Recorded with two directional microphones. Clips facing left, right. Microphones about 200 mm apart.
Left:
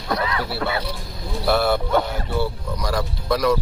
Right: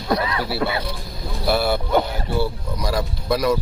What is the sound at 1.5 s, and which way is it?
Speech, 5° right (ahead or behind).